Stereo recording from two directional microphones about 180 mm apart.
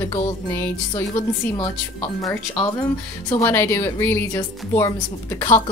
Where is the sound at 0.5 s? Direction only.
15° left (ahead or behind).